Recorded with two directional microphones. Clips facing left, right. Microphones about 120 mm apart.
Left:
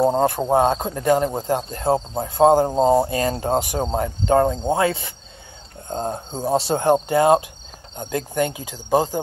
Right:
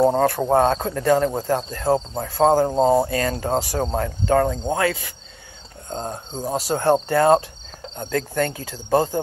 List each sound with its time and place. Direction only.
0.2 s cricket: 20° left (ahead or behind)
0.5 s speech: 15° left (ahead or behind)
2.1 s cricket: 20° left (ahead or behind)
6.8 s speech: 15° left (ahead or behind)